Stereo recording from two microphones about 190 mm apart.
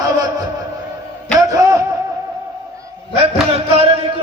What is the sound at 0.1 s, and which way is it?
Music, 20° right (ahead or behind).